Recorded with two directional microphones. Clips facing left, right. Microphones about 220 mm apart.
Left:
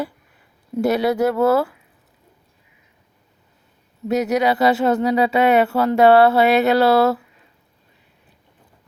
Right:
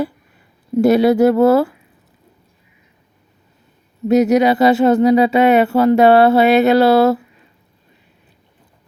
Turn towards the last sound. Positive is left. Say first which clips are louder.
# right 4 dB
turn(degrees=-20)  # may be behind; listen again after turning